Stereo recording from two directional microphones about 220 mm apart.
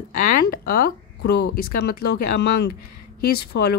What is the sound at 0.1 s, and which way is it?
A woman's voice, 40° left (ahead or behind).